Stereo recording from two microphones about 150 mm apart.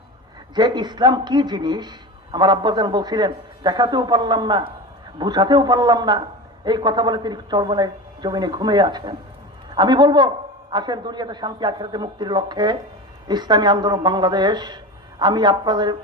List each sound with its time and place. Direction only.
0.5 s speech: 30° right (ahead or behind)